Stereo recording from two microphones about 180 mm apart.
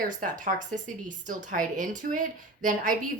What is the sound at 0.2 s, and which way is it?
Speech, 45° right (ahead or behind).